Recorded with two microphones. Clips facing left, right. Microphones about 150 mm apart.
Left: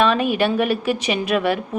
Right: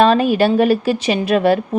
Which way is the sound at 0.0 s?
35° right (ahead or behind).